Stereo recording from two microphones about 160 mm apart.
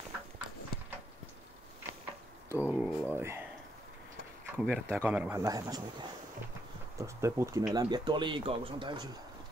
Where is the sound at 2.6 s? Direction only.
10° right (ahead or behind).